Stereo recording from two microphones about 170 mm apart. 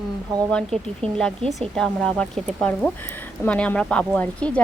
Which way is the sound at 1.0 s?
35° right (ahead or behind).